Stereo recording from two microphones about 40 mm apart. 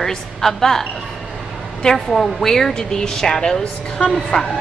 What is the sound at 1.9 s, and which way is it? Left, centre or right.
A woman's voice, centre.